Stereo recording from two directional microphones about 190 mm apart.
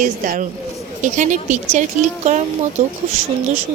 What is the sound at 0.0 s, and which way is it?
A woman's voice, 45° right (ahead or behind).